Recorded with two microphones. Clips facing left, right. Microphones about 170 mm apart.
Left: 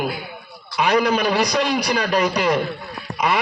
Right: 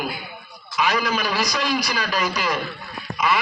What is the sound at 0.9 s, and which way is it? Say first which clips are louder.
A man's voice: left 8 dB; 60° left (ahead or behind).